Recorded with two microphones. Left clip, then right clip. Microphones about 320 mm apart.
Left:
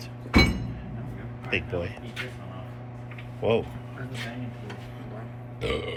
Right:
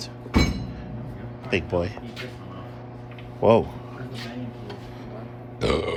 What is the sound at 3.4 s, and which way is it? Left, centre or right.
Speech, centre.